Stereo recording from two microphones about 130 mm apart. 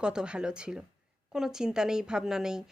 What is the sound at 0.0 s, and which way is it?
A woman's voice, 5° right (ahead or behind).